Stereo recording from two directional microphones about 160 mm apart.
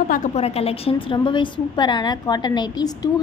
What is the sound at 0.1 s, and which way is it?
A woman's voice, 50° left (ahead or behind).